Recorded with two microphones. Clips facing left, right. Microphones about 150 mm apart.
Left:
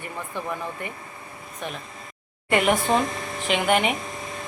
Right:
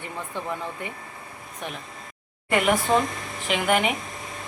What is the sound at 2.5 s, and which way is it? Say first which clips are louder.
A woman's voice: even; centre (ahead or behind).